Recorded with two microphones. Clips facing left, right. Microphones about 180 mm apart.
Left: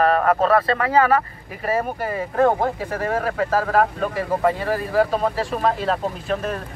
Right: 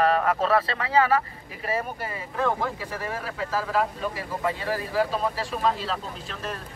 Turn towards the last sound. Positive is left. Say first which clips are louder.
# left 10 dB
turn(degrees=55)  # may be behind; listen again after turning